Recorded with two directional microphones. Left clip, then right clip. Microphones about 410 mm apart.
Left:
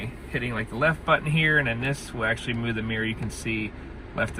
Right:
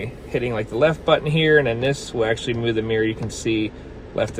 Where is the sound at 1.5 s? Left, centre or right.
Right.